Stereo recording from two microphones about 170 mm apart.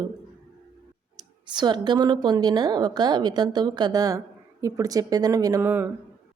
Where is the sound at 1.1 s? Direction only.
25° right (ahead or behind).